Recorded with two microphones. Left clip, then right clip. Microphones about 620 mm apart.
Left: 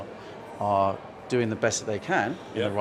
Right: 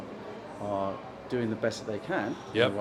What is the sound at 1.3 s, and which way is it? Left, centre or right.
Speech, left.